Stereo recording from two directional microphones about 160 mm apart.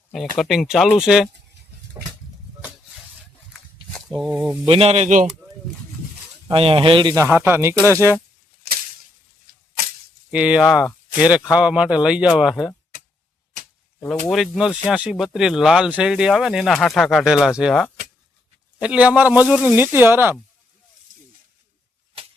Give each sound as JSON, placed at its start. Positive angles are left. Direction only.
{"t": 0.1, "sound": "speech", "side_deg": 0}
{"t": 3.9, "sound": "a sound", "side_deg": 5}
{"t": 4.6, "sound": "speech", "side_deg": -40}
{"t": 6.5, "sound": "a man's voice", "side_deg": -35}
{"t": 8.7, "sound": "a sound", "side_deg": -70}
{"t": 10.3, "sound": "speech", "side_deg": -5}
{"t": 14.3, "sound": "speech", "side_deg": 0}